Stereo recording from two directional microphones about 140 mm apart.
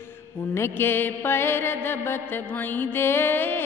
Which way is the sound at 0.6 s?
15° left (ahead or behind).